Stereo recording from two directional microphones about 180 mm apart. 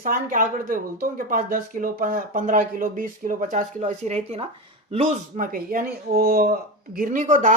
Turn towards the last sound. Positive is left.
turn(degrees=-45)  # may be behind; listen again after turning